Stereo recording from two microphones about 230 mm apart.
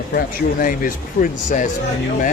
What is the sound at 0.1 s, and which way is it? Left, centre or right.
Speech, left.